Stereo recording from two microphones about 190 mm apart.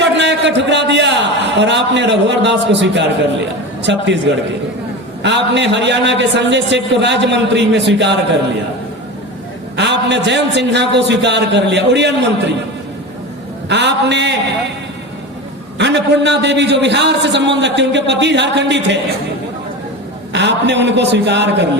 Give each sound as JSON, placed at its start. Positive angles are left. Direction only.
{"t": 0.0, "sound": "a man's voice", "side_deg": -65}
{"t": 9.7, "sound": "a man's voice", "side_deg": -65}
{"t": 13.7, "sound": "a man's voice", "side_deg": -65}
{"t": 15.8, "sound": "a man's voice", "side_deg": -65}
{"t": 20.3, "sound": "a man's voice", "side_deg": -65}